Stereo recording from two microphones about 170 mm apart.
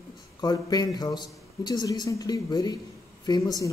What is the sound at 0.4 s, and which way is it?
Speech, 25° left (ahead or behind).